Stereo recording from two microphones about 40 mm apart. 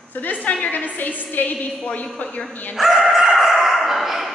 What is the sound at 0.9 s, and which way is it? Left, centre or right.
A woman's voice, left.